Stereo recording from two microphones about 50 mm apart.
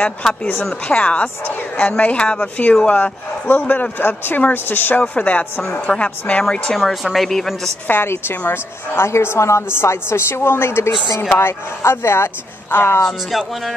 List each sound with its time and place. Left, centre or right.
0.8 s speech: left
3.0 s speech: left
5.9 s speech: left
6.8 s a woman's voice: centre
7.9 s a woman's voice: left